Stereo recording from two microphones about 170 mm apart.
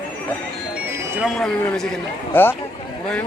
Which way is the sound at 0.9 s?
15° right (ahead or behind).